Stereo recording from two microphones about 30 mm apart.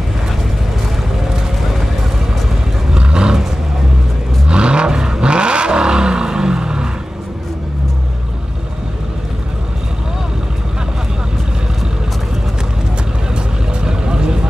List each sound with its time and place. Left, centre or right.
3.0 s roaring cats: right
4.5 s vehicle: right
13.8 s vehicle: right